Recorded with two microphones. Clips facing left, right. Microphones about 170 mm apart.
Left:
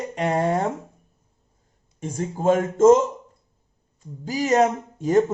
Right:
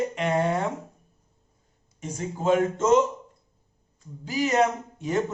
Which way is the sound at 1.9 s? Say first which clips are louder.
Left 4 dB; 50° left (ahead or behind).